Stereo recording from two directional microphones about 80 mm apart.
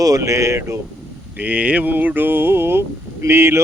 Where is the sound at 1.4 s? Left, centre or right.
Centre.